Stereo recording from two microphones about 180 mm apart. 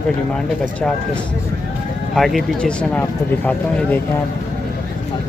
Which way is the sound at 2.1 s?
Centre (ahead or behind).